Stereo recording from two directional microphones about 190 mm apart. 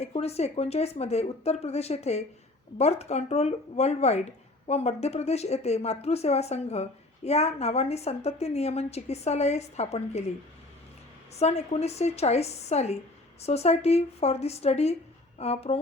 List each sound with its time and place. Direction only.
0.0 s a woman's voice: 35° left (ahead or behind)
11.3 s a woman's voice: 35° left (ahead or behind)